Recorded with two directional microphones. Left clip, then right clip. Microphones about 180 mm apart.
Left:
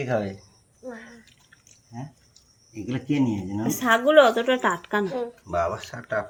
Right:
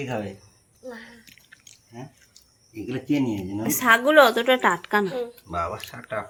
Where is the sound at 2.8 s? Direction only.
50° left (ahead or behind).